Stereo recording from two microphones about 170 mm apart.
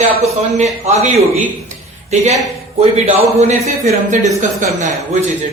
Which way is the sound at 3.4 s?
40° right (ahead or behind).